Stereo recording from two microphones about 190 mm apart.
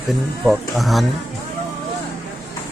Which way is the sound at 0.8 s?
Centre (ahead or behind).